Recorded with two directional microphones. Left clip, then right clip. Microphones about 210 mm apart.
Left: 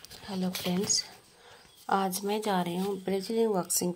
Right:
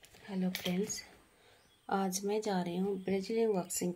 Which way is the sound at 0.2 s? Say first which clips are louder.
Left 4 dB; 10° left (ahead or behind).